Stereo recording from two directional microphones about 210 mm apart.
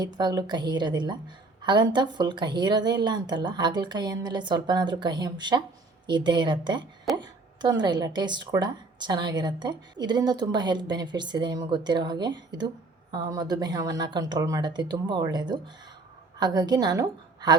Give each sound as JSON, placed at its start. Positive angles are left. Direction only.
{"t": 0.0, "sound": "a woman's voice", "side_deg": -20}